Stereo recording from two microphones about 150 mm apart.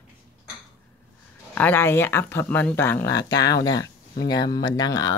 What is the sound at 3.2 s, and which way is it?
Speech, 25° left (ahead or behind).